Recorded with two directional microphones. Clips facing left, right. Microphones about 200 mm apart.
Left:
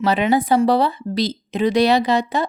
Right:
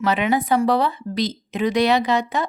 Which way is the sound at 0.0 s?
35° left (ahead or behind).